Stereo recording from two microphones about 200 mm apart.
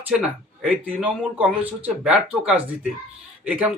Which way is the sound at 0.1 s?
5° right (ahead or behind).